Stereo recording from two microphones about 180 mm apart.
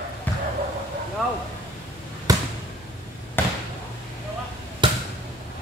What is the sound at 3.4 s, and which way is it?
Chop, 10° left (ahead or behind).